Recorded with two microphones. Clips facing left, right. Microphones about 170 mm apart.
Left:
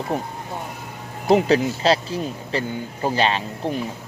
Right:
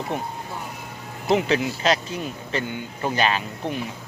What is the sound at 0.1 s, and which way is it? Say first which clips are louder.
Speech: left 4 dB; 35° left (ahead or behind).